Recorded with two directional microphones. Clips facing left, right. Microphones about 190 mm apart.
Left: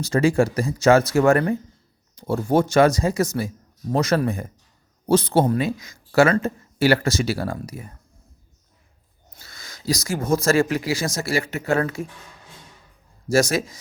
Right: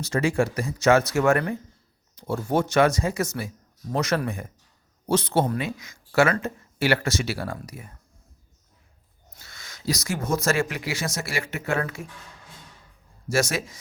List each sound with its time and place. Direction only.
0.0 s speech: 35° left (ahead or behind)
9.3 s speech: 35° left (ahead or behind)
13.3 s speech: 35° left (ahead or behind)